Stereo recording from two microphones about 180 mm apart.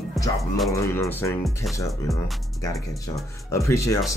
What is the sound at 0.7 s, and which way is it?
Speech, 15° left (ahead or behind).